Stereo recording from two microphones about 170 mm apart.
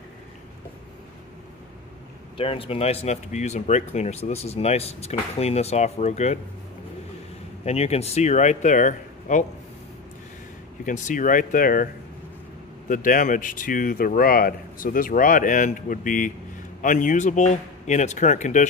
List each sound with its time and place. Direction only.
2.3 s speech: 35° left (ahead or behind)
7.6 s speech: 40° left (ahead or behind)
10.9 s speech: 50° left (ahead or behind)